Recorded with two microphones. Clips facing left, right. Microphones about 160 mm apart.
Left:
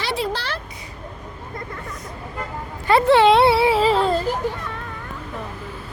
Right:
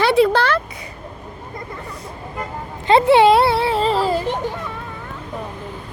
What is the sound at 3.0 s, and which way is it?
Speech, 15° right (ahead or behind).